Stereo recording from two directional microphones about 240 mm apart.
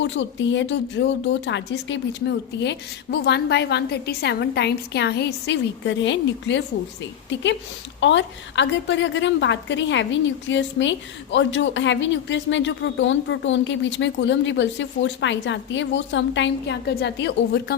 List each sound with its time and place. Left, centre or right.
0.0 s a woman's voice: left